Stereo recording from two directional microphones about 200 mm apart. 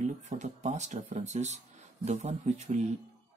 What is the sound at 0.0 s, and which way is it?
Speech, 40° right (ahead or behind).